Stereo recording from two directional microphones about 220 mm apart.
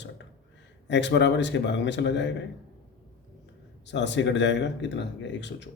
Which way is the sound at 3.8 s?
55° left (ahead or behind).